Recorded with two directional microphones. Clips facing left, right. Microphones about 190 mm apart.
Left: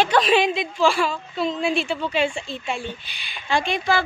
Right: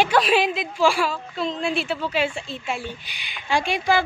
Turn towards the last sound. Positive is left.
turn(degrees=-10)  # may be behind; listen again after turning